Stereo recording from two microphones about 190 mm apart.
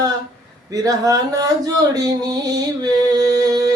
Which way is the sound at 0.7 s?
20° right (ahead or behind).